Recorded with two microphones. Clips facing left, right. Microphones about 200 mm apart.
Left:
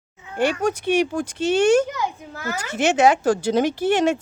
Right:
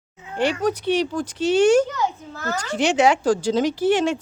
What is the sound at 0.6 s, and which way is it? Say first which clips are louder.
Speech: left 1 dB; 50° left (ahead or behind).